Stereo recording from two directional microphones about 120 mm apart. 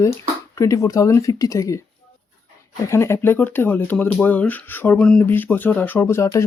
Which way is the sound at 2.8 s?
20° left (ahead or behind).